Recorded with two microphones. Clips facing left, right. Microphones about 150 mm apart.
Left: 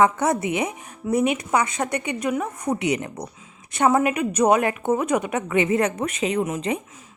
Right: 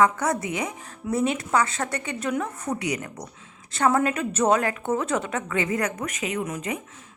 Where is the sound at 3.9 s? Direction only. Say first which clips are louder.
Left 3 dB; 15° left (ahead or behind).